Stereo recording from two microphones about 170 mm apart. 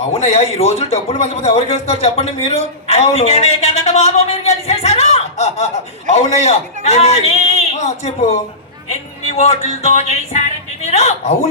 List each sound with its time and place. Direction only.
0.1 s a man's voice: 40° left (ahead or behind)